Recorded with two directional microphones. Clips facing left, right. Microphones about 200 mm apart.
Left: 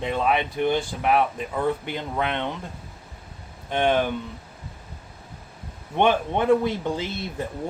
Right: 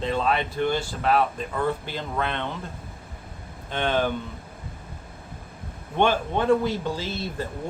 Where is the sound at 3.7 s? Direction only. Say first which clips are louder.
Left 3 dB; 15° left (ahead or behind).